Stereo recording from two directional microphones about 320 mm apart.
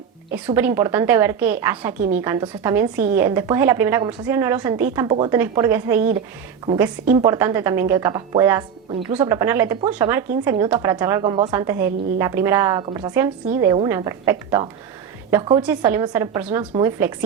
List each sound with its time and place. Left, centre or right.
0.3 s a woman's voice: centre
2.0 s a woman's voice: right
2.2 s a woman's voice: centre